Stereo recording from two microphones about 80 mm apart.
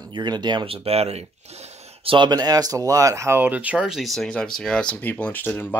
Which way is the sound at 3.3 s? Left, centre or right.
Right.